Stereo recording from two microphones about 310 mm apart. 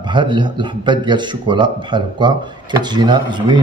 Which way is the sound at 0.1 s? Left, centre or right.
Centre.